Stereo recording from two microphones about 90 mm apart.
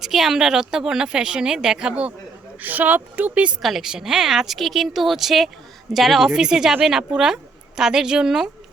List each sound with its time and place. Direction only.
0.0 s a woman's voice: 5° right (ahead or behind)
3.6 s a woman's voice: 5° right (ahead or behind)